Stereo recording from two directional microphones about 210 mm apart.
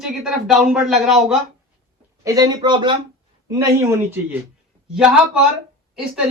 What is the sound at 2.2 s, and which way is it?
Speech, 15° right (ahead or behind).